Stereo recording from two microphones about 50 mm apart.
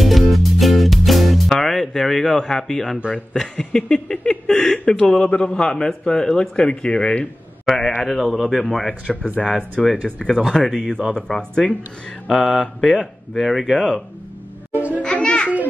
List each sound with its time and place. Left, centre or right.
0.0 s music: centre
3.5 s speech: centre
7.6 s speech: centre
9.0 s speech: right
10.0 s speech: centre
13.4 s speech: centre
15.0 s a child's voice: left